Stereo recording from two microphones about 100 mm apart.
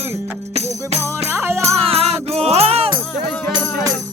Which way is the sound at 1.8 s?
85° right.